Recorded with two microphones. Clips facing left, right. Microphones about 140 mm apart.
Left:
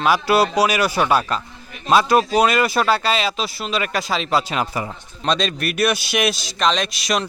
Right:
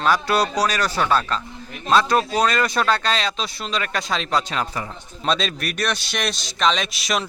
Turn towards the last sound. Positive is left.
turn(degrees=0)  # may be behind; listen again after turning